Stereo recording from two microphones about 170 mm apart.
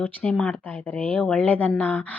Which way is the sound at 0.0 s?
5° left (ahead or behind).